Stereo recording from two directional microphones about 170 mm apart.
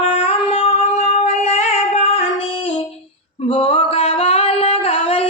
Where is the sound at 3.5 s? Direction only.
35° left (ahead or behind).